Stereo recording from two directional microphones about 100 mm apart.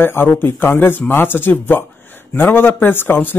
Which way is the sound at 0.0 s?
20° left (ahead or behind).